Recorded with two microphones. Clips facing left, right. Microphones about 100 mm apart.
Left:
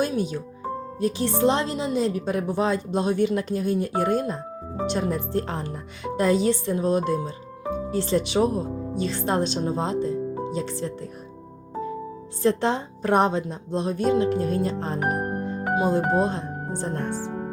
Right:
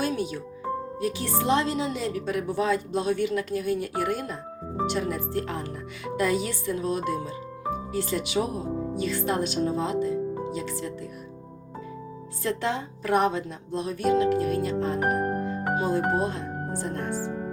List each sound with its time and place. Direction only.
0.0 s a woman's voice: 20° left (ahead or behind)
12.4 s a woman's voice: 30° left (ahead or behind)
15.7 s speech: 15° left (ahead or behind)